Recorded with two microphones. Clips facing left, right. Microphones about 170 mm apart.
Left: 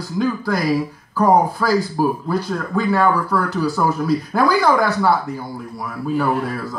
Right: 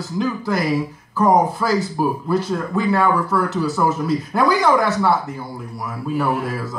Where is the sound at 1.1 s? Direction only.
20° right (ahead or behind).